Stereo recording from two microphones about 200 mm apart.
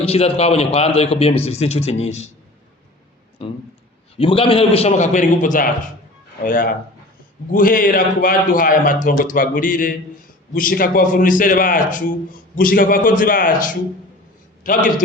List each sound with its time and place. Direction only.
0.0 s a man's voice: 30° left (ahead or behind)
3.4 s a man's voice: 30° left (ahead or behind)